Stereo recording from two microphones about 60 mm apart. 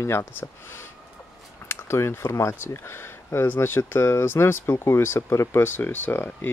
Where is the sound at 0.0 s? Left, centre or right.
Left.